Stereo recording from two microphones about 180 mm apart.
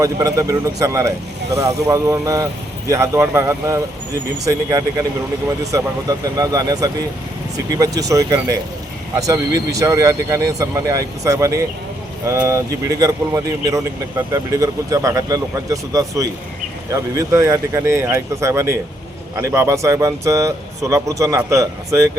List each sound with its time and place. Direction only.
0.0 s speech: 20° right (ahead or behind)